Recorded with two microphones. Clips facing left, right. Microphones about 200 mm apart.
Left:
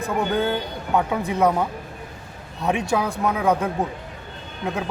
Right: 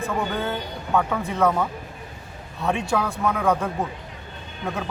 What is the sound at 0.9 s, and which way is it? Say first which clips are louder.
A man's voice: left 1 dB; 15° left (ahead or behind).